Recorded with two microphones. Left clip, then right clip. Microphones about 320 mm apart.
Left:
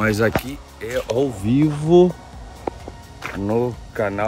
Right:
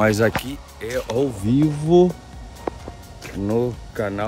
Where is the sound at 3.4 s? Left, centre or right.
Centre.